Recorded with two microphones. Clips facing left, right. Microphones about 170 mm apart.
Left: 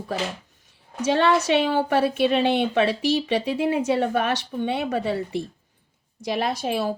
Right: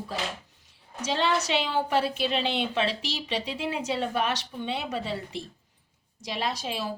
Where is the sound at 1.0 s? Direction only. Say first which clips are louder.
Left 7 dB; 55° left (ahead or behind).